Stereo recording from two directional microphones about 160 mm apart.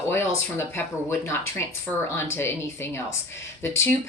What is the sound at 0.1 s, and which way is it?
Speech, 15° left (ahead or behind).